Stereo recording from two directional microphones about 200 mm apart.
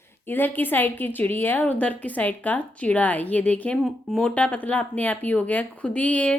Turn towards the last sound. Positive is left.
turn(degrees=5)  # may be behind; listen again after turning